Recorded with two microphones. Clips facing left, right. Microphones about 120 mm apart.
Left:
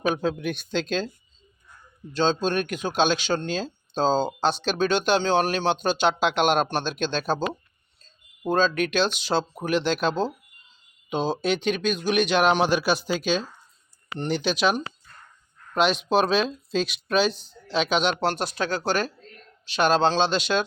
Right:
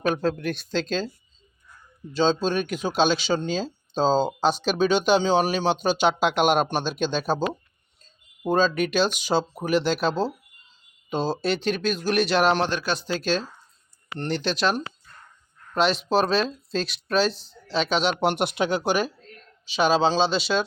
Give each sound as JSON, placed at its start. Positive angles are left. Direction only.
{"t": 0.0, "sound": "speech", "side_deg": 0}
{"t": 2.1, "sound": "speech", "side_deg": -5}
{"t": 18.2, "sound": "speech", "side_deg": -20}